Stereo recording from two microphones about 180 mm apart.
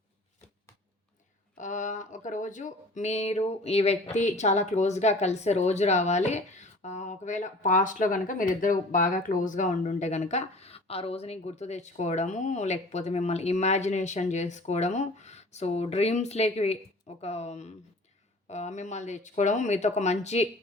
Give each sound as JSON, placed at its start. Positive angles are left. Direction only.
{"t": 1.5, "sound": "speech", "side_deg": 45}